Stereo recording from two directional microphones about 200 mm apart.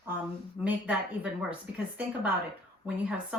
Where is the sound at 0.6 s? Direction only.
5° right (ahead or behind).